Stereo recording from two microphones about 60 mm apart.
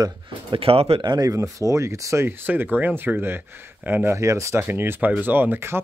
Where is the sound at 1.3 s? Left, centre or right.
Right.